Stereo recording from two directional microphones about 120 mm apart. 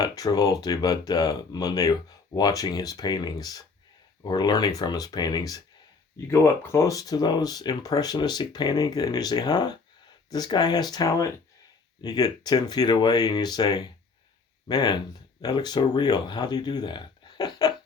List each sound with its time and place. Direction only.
0.0 s speech: 30° left (ahead or behind)
6.2 s speech: 20° left (ahead or behind)